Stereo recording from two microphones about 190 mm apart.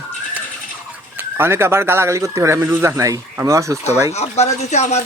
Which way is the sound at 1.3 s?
15° right (ahead or behind).